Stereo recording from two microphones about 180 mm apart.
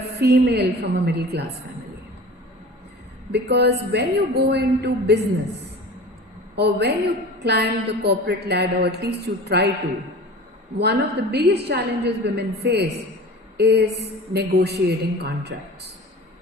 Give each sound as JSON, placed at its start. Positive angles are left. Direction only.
{"t": 0.2, "sound": "a woman's voice", "side_deg": -65}
{"t": 3.3, "sound": "a woman's voice", "side_deg": -65}
{"t": 6.6, "sound": "a woman's voice", "side_deg": -65}
{"t": 10.8, "sound": "a woman's voice", "side_deg": -65}